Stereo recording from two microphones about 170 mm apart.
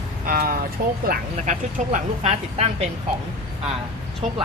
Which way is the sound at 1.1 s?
45° right (ahead or behind).